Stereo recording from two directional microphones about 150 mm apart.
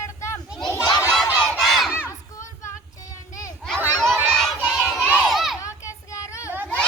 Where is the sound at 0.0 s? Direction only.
20° left (ahead or behind).